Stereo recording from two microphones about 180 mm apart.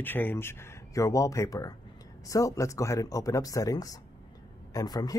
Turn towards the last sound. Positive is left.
turn(degrees=20)  # may be behind; listen again after turning